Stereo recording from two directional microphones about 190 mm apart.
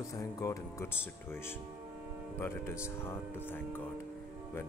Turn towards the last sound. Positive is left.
turn(degrees=10)  # may be behind; listen again after turning